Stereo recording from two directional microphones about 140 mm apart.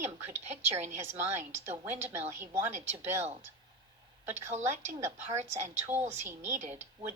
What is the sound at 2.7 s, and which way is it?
Speech, 55° right (ahead or behind).